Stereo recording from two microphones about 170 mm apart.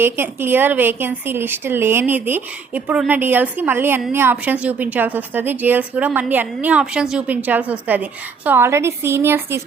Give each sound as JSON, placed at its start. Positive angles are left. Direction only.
{"t": 0.0, "sound": "a woman's voice", "side_deg": -15}